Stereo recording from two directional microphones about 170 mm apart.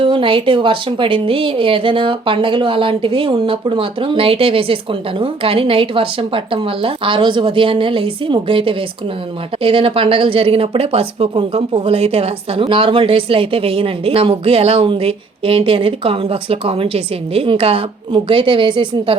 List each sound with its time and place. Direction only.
0.0 s speech: 30° right (ahead or behind)